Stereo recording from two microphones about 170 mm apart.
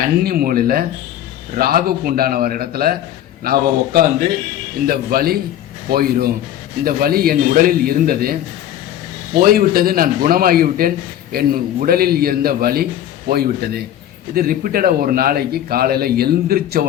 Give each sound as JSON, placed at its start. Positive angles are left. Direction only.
{"t": 0.0, "sound": "a man's voice", "side_deg": -65}